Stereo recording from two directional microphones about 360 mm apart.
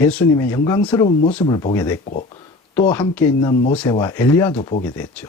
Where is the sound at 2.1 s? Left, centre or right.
Centre.